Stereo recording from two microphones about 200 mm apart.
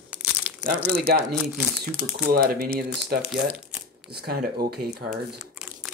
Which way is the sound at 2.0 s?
50° right (ahead or behind).